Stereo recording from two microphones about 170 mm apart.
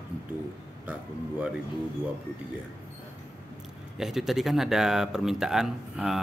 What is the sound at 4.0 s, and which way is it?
A man's voice, centre (ahead or behind).